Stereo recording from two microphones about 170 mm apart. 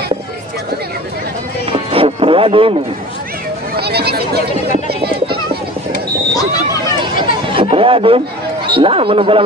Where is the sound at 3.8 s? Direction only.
70° right (ahead or behind).